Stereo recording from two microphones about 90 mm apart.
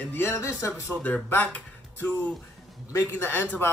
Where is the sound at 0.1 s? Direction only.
30° left (ahead or behind).